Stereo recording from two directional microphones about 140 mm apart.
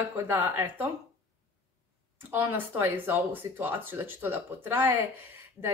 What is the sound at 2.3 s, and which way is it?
Speech, 15° right (ahead or behind).